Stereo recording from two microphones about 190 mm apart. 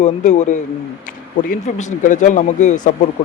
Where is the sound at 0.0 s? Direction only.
40° left (ahead or behind).